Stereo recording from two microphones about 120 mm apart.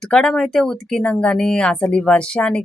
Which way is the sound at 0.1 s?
5° left (ahead or behind).